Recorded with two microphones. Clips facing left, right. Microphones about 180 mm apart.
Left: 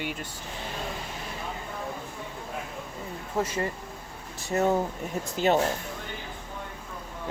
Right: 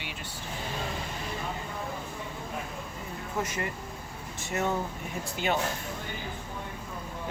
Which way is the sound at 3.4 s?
30° left (ahead or behind).